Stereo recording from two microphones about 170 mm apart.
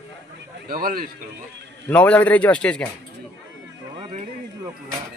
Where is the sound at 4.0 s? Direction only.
35° right (ahead or behind).